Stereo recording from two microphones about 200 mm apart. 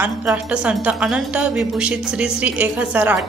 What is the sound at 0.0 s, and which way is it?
A woman's voice, 5° right (ahead or behind).